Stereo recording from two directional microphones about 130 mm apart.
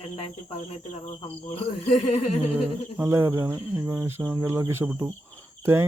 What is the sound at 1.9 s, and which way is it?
Speech, 50° left (ahead or behind).